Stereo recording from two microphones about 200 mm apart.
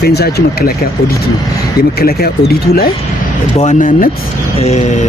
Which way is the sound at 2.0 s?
50° left (ahead or behind).